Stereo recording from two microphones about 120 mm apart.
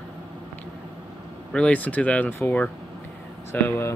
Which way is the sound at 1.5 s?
10° left (ahead or behind).